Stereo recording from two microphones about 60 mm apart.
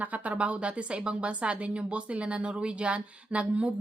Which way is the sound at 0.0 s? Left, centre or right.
Right.